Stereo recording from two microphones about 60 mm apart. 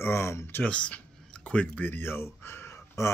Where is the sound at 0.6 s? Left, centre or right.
Centre.